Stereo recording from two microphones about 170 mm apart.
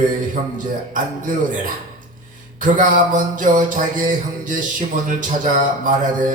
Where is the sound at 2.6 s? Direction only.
50° right (ahead or behind).